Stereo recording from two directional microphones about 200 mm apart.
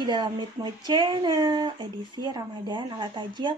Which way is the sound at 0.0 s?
25° right (ahead or behind).